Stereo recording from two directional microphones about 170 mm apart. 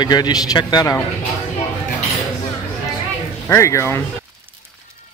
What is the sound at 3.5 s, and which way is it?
Speech, 15° left (ahead or behind).